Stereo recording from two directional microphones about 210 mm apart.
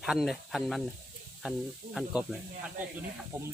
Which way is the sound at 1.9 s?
5° right (ahead or behind).